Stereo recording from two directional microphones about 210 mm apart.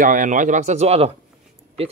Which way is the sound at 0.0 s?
40° right (ahead or behind).